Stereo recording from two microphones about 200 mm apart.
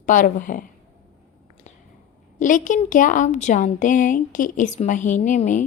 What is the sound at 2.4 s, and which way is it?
A woman's voice, 40° left (ahead or behind).